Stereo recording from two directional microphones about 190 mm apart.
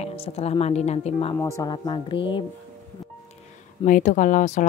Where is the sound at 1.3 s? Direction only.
15° left (ahead or behind).